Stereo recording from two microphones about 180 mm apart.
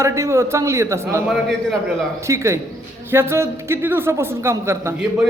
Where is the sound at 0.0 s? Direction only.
15° right (ahead or behind).